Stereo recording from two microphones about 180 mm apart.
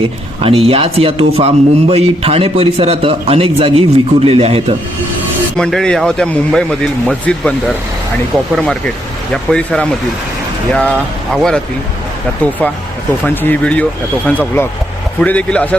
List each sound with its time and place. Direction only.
0.4 s a man's voice: 30° right (ahead or behind)
5.5 s speech: 5° left (ahead or behind)
8.5 s speech: 5° left (ahead or behind)
12.4 s speech: 10° left (ahead or behind)